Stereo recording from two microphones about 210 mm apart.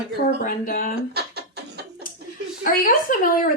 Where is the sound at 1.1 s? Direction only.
50° right (ahead or behind).